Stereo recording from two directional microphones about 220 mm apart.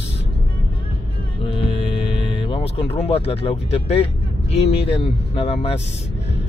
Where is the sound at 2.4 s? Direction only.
25° left (ahead or behind).